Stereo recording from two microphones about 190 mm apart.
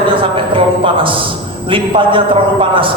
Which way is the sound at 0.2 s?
25° right (ahead or behind).